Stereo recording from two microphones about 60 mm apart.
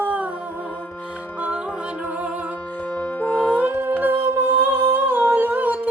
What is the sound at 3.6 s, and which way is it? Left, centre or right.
Howl, right.